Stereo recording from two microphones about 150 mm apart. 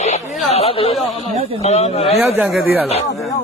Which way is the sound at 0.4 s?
45° left (ahead or behind).